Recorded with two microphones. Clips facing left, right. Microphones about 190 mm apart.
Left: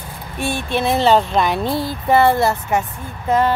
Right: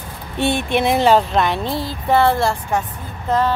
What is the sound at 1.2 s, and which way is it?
Speech, centre (ahead or behind).